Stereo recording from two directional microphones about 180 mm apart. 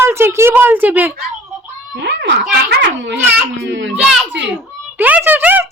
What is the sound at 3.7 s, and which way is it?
Speech, 85° right.